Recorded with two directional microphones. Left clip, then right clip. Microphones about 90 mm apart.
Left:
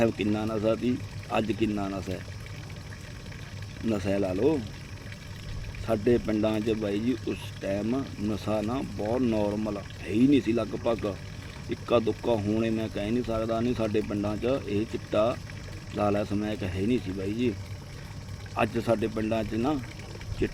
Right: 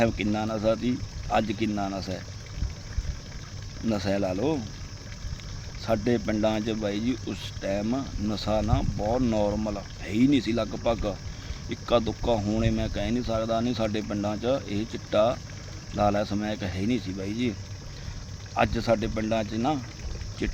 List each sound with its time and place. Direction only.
0.0 s speech: 40° right (ahead or behind)
3.8 s speech: 40° right (ahead or behind)
5.8 s speech: 45° right (ahead or behind)
18.5 s speech: 40° right (ahead or behind)